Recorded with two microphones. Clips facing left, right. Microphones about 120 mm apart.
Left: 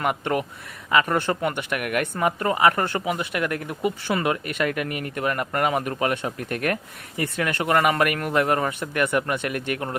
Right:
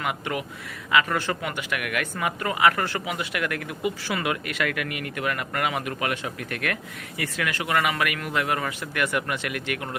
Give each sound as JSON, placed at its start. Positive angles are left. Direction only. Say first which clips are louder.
{"t": 0.0, "sound": "speech", "louder": "left 5 dB", "side_deg": 40}
{"t": 1.0, "sound": "speech", "louder": "left 4 dB", "side_deg": 25}
{"t": 1.4, "sound": "speech", "louder": "left 4 dB", "side_deg": 40}
{"t": 8.6, "sound": "speech", "louder": "left 4 dB", "side_deg": 20}
{"t": 9.1, "sound": "speech", "louder": "left 4 dB", "side_deg": 40}